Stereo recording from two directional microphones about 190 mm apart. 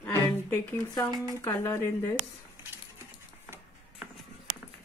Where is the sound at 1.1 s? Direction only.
20° right (ahead or behind).